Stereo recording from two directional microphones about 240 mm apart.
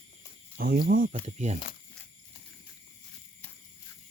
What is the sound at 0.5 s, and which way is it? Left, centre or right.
Speech, right.